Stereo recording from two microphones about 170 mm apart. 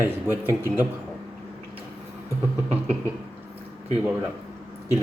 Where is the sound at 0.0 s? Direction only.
15° right (ahead or behind).